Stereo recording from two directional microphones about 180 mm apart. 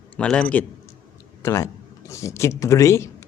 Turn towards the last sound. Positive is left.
turn(degrees=15)  # may be behind; listen again after turning